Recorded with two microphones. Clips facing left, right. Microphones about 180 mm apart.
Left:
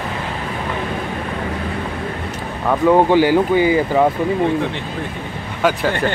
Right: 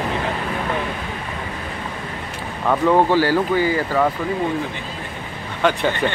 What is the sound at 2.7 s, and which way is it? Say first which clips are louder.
Speech: left 3 dB; 10° left (ahead or behind).